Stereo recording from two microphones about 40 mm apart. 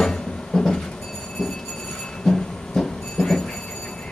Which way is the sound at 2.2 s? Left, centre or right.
Centre.